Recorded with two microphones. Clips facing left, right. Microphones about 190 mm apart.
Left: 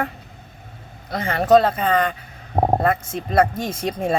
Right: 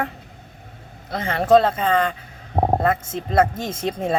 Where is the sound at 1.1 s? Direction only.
25° right (ahead or behind).